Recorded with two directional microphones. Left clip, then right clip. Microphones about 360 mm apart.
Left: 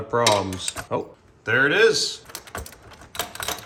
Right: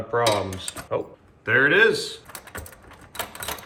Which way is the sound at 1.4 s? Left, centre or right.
Centre.